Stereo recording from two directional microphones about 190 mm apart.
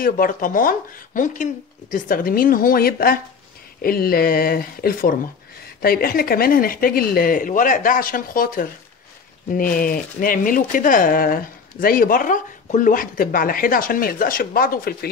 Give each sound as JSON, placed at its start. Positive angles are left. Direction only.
{"t": 0.0, "sound": "speech", "side_deg": 45}